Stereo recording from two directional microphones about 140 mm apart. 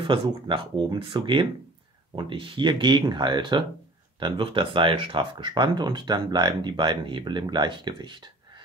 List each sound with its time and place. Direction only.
0.0 s speech: 35° right (ahead or behind)